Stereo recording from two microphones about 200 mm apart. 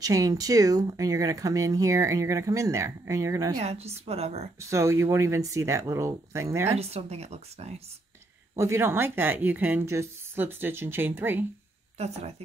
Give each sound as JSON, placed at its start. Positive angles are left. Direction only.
{"t": 0.0, "sound": "speech", "side_deg": -15}
{"t": 3.6, "sound": "speech", "side_deg": -30}
{"t": 4.6, "sound": "speech", "side_deg": -15}
{"t": 6.7, "sound": "speech", "side_deg": -30}
{"t": 8.5, "sound": "speech", "side_deg": -15}
{"t": 12.0, "sound": "speech", "side_deg": -30}